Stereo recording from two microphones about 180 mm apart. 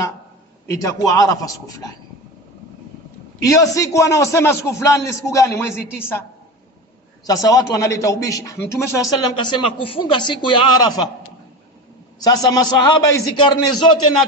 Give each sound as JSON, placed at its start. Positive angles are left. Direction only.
{"t": 0.7, "sound": "a man's voice", "side_deg": 20}
{"t": 3.4, "sound": "a man's voice", "side_deg": 20}
{"t": 7.2, "sound": "a man's voice", "side_deg": 20}
{"t": 12.2, "sound": "a man's voice", "side_deg": 20}